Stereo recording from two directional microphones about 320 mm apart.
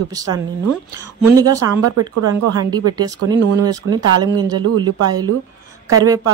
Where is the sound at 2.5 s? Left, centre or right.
Centre.